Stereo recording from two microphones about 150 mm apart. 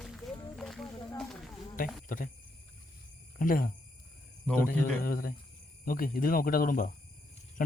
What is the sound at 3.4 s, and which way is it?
Speech, 65° left (ahead or behind).